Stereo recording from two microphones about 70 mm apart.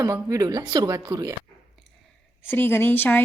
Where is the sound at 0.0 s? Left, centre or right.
Right.